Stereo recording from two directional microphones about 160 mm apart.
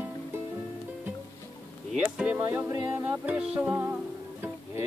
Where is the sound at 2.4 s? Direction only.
20° right (ahead or behind).